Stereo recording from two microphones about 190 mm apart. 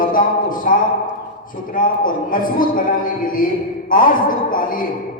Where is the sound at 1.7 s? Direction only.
45° left (ahead or behind).